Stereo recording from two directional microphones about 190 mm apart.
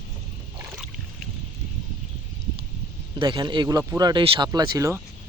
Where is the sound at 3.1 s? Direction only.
25° right (ahead or behind).